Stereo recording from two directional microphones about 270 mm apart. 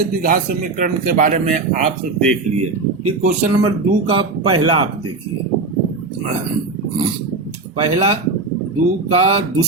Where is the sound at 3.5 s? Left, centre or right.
Centre.